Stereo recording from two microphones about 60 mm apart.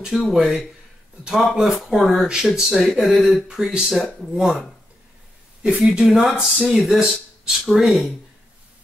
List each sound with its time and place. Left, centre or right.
0.0 s speech: centre
3.4 s speech: centre
3.8 s speech: centre
5.6 s speech: right
5.9 s speech: centre